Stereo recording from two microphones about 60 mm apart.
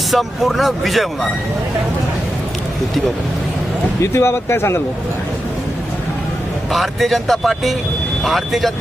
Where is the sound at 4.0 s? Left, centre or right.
Left.